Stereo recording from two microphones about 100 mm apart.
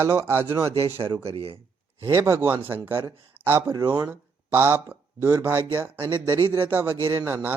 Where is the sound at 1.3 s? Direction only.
80° right.